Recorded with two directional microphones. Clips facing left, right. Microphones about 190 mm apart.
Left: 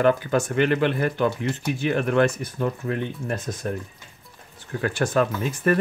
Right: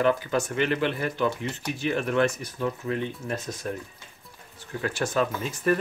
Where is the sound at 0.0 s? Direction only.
50° left (ahead or behind).